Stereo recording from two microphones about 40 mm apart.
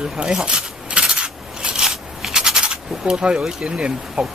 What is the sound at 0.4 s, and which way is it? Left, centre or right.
Coin, right.